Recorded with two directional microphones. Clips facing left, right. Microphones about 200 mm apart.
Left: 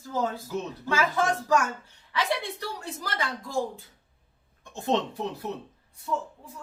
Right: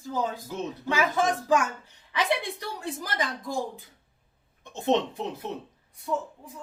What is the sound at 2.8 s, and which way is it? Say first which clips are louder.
Speech: right 4 dB; 15° right (ahead or behind).